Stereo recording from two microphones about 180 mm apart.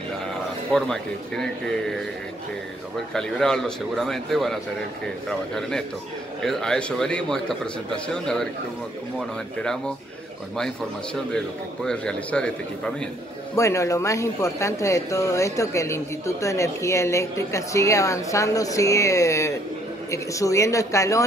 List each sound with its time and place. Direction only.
0.7 s a man's voice: centre (ahead or behind)
3.1 s a man's voice: 5° left (ahead or behind)
11.3 s a man's voice: 5° left (ahead or behind)
13.6 s speech: 15° left (ahead or behind)